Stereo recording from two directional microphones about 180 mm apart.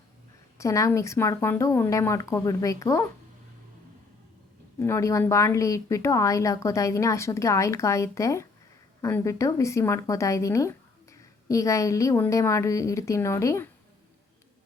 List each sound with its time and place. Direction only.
0.6 s speech: 15° left (ahead or behind)
4.8 s speech: 15° left (ahead or behind)